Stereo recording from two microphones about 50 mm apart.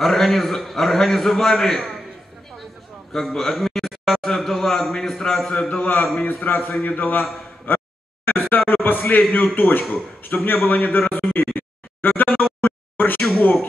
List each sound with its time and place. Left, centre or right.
0.0 s a man's voice: centre
3.3 s a man's voice: centre
5.5 s a man's voice: centre
5.8 s a man's voice: left
7.7 s a sound: left
8.3 s a man's voice: left
11.5 s music: left
13.4 s a man's voice: left